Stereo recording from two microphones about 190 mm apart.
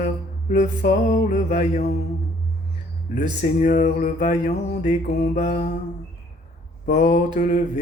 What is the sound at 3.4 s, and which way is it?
Mantra, 40° left (ahead or behind).